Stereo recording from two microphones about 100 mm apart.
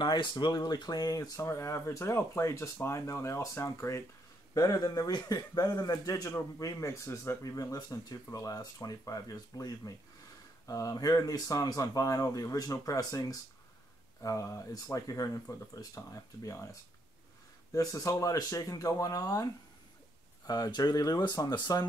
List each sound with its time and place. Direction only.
0.0 s speech: 50° left (ahead or behind); by 16.7 s 30° left (ahead or behind)
17.7 s speech: 35° left (ahead or behind)